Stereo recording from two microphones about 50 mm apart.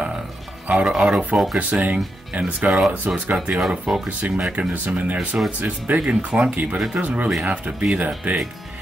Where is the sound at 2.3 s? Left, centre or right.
Right.